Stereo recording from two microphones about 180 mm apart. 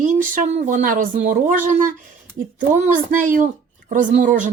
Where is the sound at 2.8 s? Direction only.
45° right (ahead or behind).